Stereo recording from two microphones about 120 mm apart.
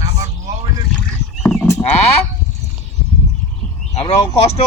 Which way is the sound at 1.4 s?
5° left (ahead or behind).